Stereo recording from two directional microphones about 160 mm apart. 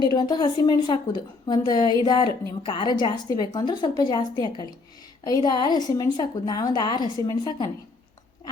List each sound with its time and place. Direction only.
0.0 s a woman's voice: 25° left (ahead or behind)